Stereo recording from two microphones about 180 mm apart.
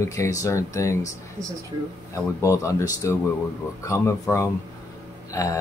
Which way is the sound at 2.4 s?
15° left (ahead or behind).